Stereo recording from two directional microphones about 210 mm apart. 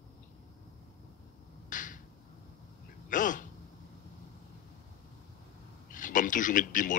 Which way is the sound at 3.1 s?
40° left (ahead or behind).